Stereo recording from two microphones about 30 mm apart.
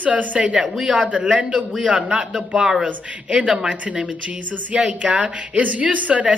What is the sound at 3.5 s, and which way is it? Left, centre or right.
Speech, right.